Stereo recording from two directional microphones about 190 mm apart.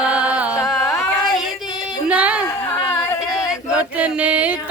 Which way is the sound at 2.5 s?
10° left (ahead or behind).